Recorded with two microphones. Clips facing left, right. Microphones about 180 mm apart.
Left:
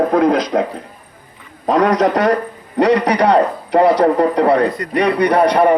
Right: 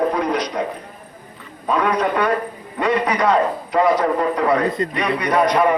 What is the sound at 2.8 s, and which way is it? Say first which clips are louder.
Speech: left 6 dB; 75° left (ahead or behind).